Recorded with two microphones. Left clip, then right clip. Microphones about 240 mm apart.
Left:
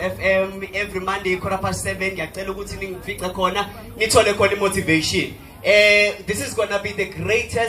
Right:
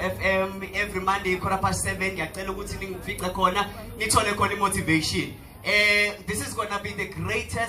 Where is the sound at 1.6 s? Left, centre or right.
Right.